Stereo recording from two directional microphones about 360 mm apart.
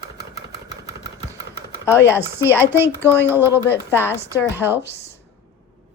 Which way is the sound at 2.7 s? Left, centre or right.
Centre.